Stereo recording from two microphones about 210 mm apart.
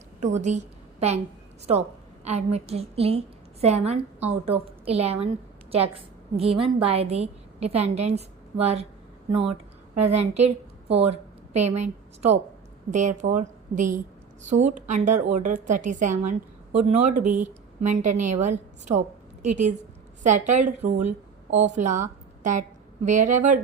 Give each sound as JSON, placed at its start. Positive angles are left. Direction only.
{"t": 0.3, "sound": "a woman's voice", "side_deg": -35}
{"t": 2.2, "sound": "a woman's voice", "side_deg": -30}
{"t": 10.0, "sound": "a woman's voice", "side_deg": -30}
{"t": 23.0, "sound": "a woman's voice", "side_deg": -35}